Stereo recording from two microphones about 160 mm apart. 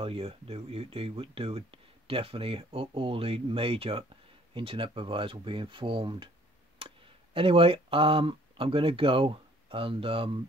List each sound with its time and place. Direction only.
0.0 s speech: 35° right (ahead or behind)
7.3 s speech: 35° right (ahead or behind)